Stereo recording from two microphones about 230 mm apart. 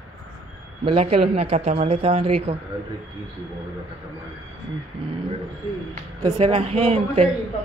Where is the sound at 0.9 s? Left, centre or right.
Right.